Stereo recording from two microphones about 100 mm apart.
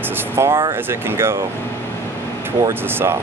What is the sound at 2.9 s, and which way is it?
Speech, 20° right (ahead or behind).